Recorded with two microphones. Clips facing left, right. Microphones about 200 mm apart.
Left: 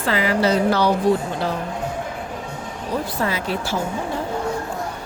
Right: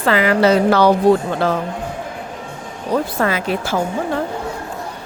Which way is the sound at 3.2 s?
60° right (ahead or behind).